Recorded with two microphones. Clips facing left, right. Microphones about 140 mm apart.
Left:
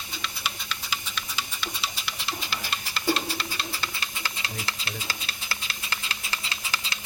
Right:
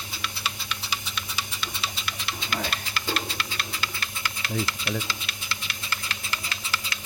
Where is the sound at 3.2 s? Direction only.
25° left (ahead or behind).